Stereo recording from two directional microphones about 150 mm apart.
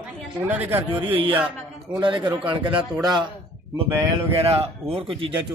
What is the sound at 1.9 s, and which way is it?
Speech, 30° right (ahead or behind).